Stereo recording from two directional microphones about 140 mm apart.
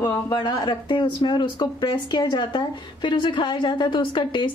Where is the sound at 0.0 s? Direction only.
30° left (ahead or behind).